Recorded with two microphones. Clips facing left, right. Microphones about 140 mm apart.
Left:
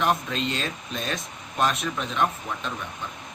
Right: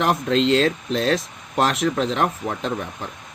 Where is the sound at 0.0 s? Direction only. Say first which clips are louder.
Right 6 dB; 90° right.